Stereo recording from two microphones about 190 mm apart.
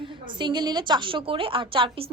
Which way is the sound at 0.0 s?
25° right (ahead or behind).